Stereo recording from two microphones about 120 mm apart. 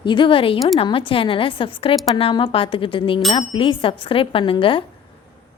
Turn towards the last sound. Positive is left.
turn(degrees=45)  # may be behind; listen again after turning